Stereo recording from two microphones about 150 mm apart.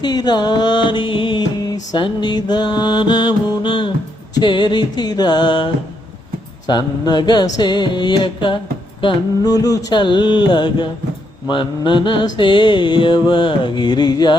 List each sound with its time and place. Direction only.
0.0 s mantra: 30° left (ahead or behind)